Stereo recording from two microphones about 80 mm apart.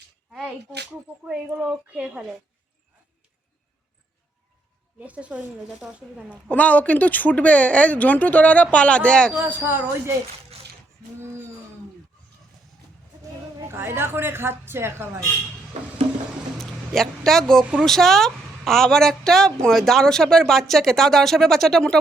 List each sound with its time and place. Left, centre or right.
0.3 s speech: centre
4.9 s speech: centre
6.5 s speech: centre
9.3 s a woman's voice: right
13.7 s a woman's voice: right
16.6 s a woman's voice: centre